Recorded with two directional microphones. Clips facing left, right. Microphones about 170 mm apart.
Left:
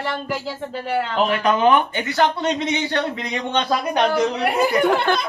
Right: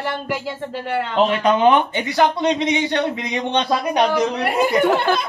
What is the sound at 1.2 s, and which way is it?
Speech, 25° right (ahead or behind).